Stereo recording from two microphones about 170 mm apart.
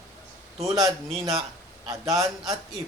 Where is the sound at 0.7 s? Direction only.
20° right (ahead or behind).